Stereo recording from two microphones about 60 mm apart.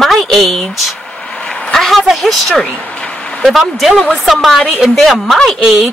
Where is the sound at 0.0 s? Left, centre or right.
Centre.